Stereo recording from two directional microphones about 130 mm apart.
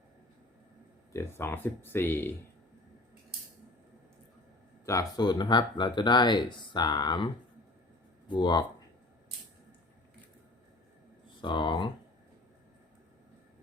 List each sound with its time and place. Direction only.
1.1 s speech: 20° left (ahead or behind)
4.9 s speech: 30° left (ahead or behind)
8.3 s speech: 35° left (ahead or behind)
11.3 s speech: 40° left (ahead or behind)